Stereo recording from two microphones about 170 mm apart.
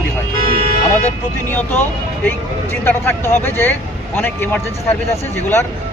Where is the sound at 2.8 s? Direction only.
15° left (ahead or behind).